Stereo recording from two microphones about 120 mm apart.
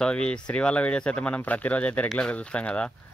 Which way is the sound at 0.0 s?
10° left (ahead or behind).